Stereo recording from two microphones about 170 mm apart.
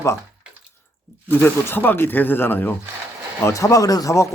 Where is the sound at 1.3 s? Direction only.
10° left (ahead or behind).